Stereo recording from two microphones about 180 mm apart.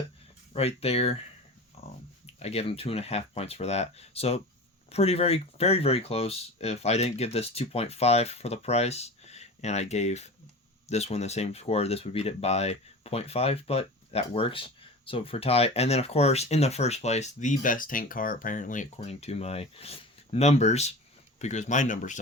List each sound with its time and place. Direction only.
0.5 s speech: 35° left (ahead or behind)
1.8 s a sound: 35° left (ahead or behind)
2.2 s speech: 35° left (ahead or behind)